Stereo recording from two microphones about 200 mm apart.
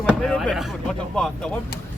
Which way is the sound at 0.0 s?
5° left (ahead or behind).